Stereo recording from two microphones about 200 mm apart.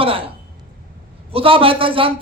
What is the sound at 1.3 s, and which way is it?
Speech, 25° right (ahead or behind).